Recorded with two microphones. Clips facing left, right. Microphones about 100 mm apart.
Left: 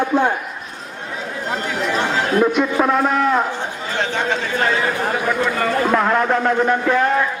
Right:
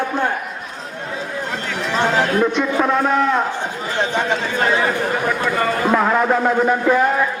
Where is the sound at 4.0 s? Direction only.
15° right (ahead or behind).